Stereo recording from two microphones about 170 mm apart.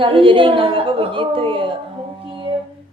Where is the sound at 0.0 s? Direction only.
30° right (ahead or behind).